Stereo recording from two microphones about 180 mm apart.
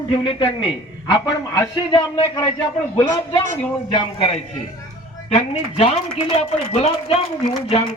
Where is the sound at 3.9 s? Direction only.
30° left (ahead or behind).